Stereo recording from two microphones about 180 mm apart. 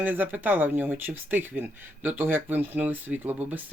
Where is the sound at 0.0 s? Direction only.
10° right (ahead or behind).